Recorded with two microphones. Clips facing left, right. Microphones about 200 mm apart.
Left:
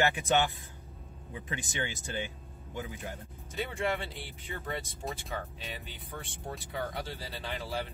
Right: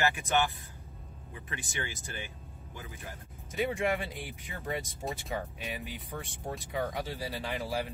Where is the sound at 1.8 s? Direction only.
20° left (ahead or behind).